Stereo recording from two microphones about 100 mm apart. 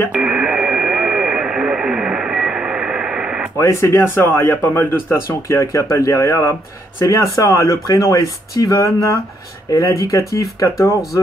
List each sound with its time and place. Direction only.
0.1 s radio: 10° right (ahead or behind)
3.5 s speech: 30° left (ahead or behind)